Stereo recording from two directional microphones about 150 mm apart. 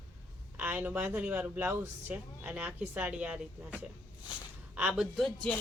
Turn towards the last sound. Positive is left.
turn(degrees=0)  # may be behind; listen again after turning